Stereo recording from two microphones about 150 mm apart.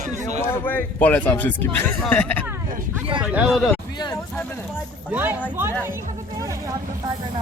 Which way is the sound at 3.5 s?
Centre (ahead or behind).